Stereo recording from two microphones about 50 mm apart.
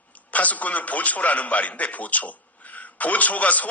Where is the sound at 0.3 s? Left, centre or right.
Left.